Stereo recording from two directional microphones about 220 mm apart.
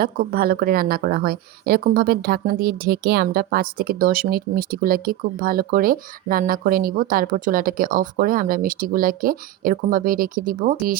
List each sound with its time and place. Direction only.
0.0 s speech: 45° right (ahead or behind)